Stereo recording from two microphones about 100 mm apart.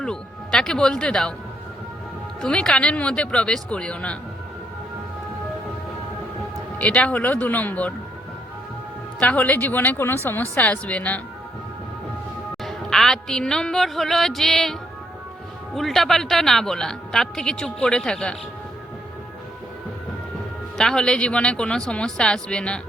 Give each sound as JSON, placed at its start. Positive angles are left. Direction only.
{"t": 0.0, "sound": "speech", "side_deg": 5}
{"t": 2.4, "sound": "speech", "side_deg": 5}
{"t": 6.7, "sound": "speech", "side_deg": 15}
{"t": 9.2, "sound": "speech", "side_deg": 15}
{"t": 12.6, "sound": "a woman's voice", "side_deg": 5}
{"t": 20.7, "sound": "speech", "side_deg": 5}